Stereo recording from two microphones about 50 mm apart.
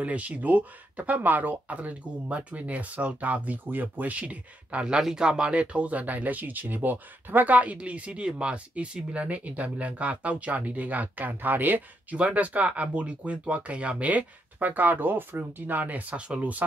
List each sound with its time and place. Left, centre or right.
0.0 s speech: right